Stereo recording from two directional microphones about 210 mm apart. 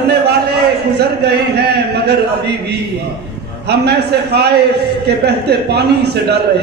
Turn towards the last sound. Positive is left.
turn(degrees=-50)  # may be behind; listen again after turning